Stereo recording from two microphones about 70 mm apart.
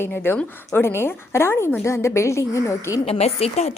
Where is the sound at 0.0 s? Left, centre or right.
Left.